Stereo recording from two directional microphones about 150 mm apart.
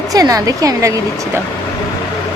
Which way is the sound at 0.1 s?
25° right (ahead or behind).